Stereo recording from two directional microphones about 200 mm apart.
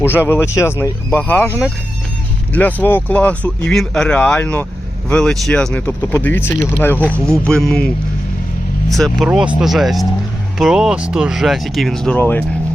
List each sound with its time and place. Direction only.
0.0 s speech: 10° left (ahead or behind)